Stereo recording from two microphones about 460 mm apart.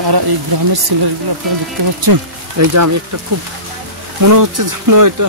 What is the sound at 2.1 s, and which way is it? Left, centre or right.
Speech, right.